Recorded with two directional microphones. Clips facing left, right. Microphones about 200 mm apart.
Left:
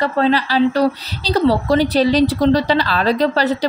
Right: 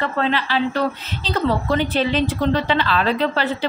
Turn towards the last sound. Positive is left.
turn(degrees=40)  # may be behind; listen again after turning